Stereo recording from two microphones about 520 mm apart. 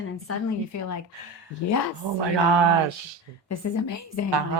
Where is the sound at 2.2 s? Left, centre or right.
Right.